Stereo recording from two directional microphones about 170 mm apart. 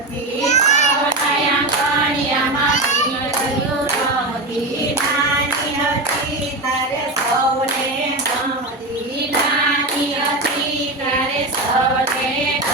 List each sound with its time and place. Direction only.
0.4 s child singing: 45° left (ahead or behind)